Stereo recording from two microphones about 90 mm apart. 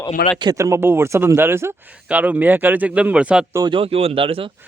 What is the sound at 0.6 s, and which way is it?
Speech, 30° right (ahead or behind).